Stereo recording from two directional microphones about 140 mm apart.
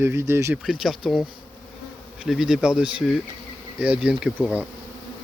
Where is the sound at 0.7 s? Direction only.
Centre (ahead or behind).